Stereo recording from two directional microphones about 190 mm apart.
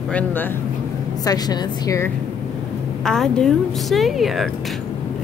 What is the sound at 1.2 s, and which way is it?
Speech, 20° left (ahead or behind).